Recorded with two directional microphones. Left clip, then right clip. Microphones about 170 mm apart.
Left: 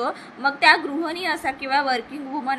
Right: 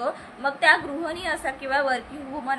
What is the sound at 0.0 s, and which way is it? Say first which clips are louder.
A woman's voice: left 3 dB; 20° left (ahead or behind).